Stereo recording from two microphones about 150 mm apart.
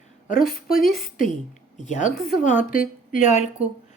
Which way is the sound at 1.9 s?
60° left (ahead or behind).